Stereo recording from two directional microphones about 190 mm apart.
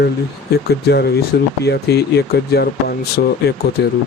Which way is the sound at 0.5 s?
60° left (ahead or behind).